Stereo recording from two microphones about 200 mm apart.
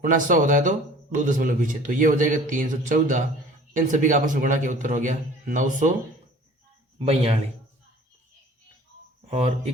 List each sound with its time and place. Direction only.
0.0 s speech: 40° right (ahead or behind)
7.0 s a man's voice: 30° right (ahead or behind)